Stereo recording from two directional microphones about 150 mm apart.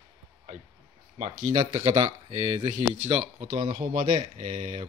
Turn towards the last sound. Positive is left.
turn(degrees=-50)  # may be behind; listen again after turning